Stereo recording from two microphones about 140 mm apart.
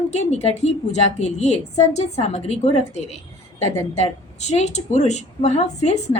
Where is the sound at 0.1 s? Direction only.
55° left (ahead or behind).